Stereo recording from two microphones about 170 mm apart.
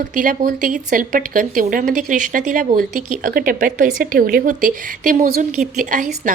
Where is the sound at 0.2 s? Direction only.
55° right (ahead or behind).